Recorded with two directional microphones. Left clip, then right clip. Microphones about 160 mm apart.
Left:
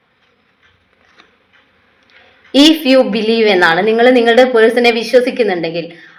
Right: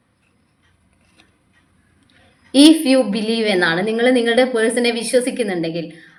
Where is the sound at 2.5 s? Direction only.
20° right (ahead or behind).